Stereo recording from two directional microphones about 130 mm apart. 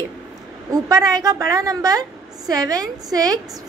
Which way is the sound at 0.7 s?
30° right (ahead or behind).